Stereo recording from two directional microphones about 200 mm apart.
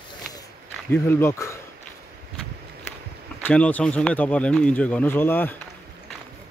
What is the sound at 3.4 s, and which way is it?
Speech, 5° left (ahead or behind).